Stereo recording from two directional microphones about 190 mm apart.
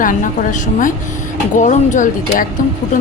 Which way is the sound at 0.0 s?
45° left (ahead or behind).